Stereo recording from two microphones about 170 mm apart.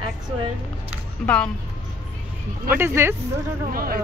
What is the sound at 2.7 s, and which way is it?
Speech, 15° right (ahead or behind).